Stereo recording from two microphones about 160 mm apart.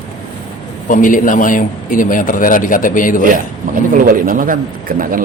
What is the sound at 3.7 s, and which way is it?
Speech, 60° right (ahead or behind).